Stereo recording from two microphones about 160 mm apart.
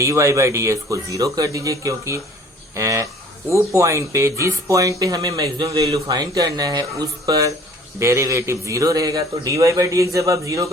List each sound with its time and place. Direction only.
0.0 s speech: 20° right (ahead or behind)